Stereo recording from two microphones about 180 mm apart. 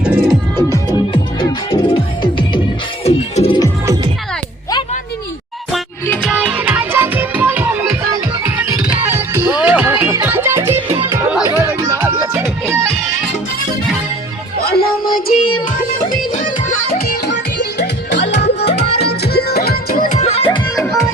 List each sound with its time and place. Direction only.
0.0 s music: 5° right (ahead or behind)
0.5 s music: 20° left (ahead or behind)
3.0 s music: 35° left (ahead or behind)
6.2 s music: 5° right (ahead or behind)
9.0 s music: 15° right (ahead or behind)
14.6 s music: 55° left (ahead or behind)
16.9 s music: 70° left (ahead or behind)
20.1 s music: 35° left (ahead or behind)
20.7 s music: 15° left (ahead or behind)